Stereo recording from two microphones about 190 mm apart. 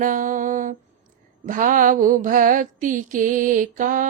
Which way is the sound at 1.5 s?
45° right (ahead or behind).